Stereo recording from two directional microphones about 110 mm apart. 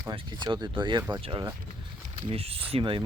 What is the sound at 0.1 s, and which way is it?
Speech, 45° right (ahead or behind).